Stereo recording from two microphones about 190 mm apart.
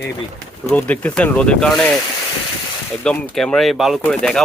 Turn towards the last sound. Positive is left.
turn(degrees=5)  # may be behind; listen again after turning